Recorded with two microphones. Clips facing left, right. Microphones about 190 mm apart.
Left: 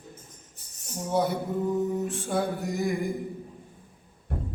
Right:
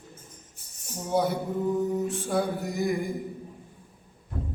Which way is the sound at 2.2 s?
Centre (ahead or behind).